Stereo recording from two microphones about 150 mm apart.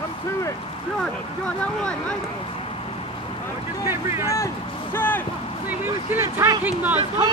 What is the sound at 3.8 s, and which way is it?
Speech, 20° right (ahead or behind).